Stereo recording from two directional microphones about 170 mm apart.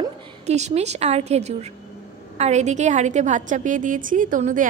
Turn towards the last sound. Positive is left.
turn(degrees=-50)  # may be behind; listen again after turning